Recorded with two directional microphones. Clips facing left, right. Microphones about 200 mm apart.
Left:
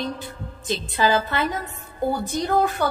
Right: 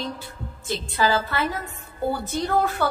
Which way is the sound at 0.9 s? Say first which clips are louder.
Left 2 dB; 20° left (ahead or behind).